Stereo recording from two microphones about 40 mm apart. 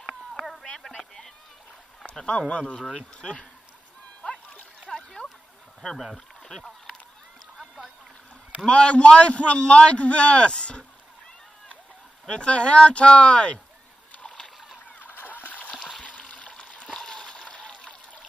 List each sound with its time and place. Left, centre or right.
2.0 s a man's voice: left
4.2 s splash: left
4.9 s a sound: centre
6.5 s honk: centre
8.6 s a man's voice: left
12.3 s a man's voice: left
14.9 s splash: left
16.0 s water: left
16.9 s water: centre